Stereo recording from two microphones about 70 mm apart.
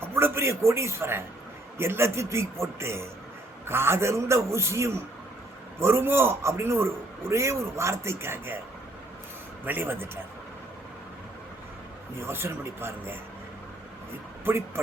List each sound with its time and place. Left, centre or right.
0.0 s a man's voice: right
9.6 s a man's voice: right
12.2 s a man's voice: right
14.5 s a man's voice: right